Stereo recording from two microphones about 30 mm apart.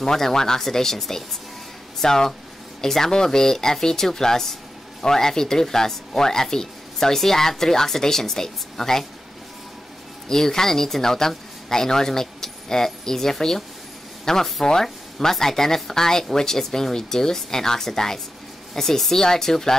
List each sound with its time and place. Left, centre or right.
0.0 s speech: centre
10.2 s speech: centre